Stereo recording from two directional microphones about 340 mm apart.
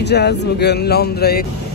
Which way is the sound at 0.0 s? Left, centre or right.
Left.